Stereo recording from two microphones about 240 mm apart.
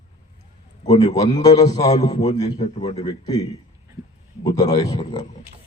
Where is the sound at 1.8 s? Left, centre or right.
Left.